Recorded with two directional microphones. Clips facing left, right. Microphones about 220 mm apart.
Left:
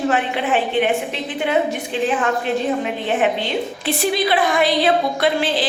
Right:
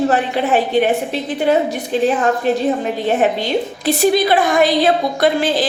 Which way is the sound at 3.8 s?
45° right (ahead or behind).